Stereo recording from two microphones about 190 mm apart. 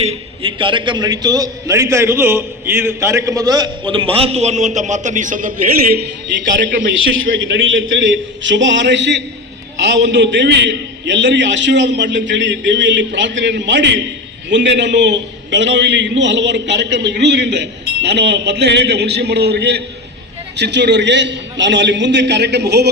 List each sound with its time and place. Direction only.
0.0 s a man's voice: 30° right (ahead or behind); by 6.1 s 50° right (ahead or behind)
7.5 s a man's voice: 85° right; by 22.9 s 60° right (ahead or behind)